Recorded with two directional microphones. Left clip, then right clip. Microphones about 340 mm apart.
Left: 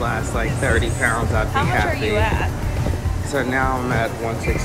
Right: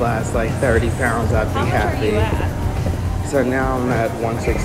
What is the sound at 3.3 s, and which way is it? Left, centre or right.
Speech, centre.